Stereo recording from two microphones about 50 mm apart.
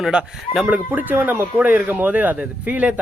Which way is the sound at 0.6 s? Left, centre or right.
Right.